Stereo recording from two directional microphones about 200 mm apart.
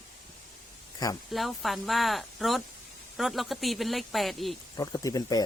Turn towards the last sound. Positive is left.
turn(degrees=20)  # may be behind; listen again after turning